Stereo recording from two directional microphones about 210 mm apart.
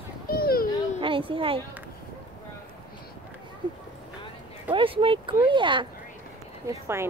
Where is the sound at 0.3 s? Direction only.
45° left (ahead or behind).